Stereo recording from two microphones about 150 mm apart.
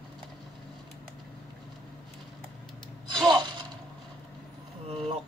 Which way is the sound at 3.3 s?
30° right (ahead or behind).